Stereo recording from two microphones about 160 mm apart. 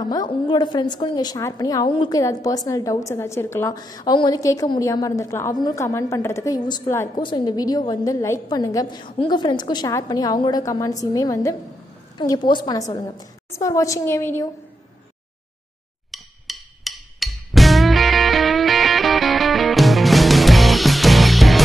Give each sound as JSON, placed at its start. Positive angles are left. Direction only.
{"t": 0.0, "sound": "a woman's voice", "side_deg": 25}
{"t": 16.1, "sound": "music", "side_deg": 0}